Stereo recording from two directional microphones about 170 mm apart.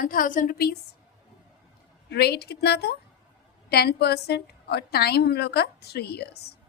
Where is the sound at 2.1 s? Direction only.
70° left (ahead or behind).